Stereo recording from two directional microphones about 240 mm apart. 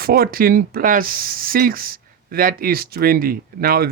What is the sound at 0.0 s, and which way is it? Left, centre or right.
Speech, right.